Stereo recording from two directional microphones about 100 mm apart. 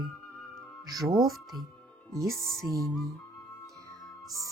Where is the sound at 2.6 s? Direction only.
35° right (ahead or behind).